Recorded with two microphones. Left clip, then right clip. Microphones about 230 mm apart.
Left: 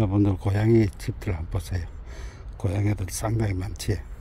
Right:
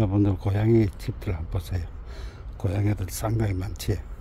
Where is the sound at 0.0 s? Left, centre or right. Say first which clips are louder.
Left 1 dB; centre.